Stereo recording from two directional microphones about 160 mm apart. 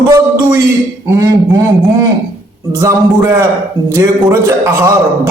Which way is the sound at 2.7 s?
20° right (ahead or behind).